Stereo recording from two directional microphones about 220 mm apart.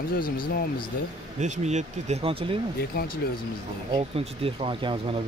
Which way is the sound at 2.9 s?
45° left (ahead or behind).